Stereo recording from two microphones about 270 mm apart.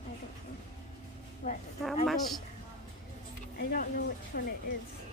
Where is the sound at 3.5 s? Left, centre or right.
Left.